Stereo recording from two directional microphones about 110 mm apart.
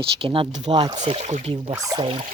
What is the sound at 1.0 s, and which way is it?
Speech, 70° right (ahead or behind).